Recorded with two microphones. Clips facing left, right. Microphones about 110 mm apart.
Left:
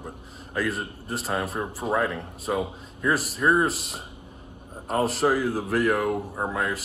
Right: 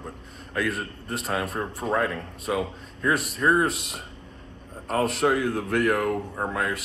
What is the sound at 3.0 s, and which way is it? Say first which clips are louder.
Speech: even; centre (ahead or behind).